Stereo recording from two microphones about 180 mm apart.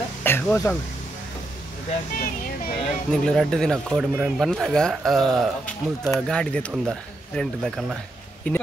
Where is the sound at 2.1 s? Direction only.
50° left (ahead or behind).